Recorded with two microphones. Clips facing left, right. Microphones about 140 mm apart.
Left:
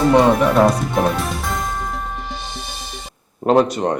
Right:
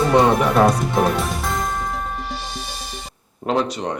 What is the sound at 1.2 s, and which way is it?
Music, centre (ahead or behind).